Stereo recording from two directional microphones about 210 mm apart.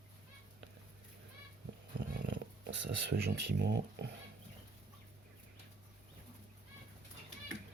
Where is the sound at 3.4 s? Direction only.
55° right (ahead or behind).